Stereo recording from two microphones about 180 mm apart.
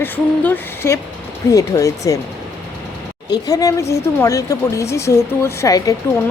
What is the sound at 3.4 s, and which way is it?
Speech, 20° left (ahead or behind).